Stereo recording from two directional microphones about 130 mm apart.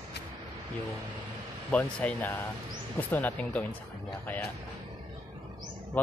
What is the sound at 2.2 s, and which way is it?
Speech, 20° left (ahead or behind).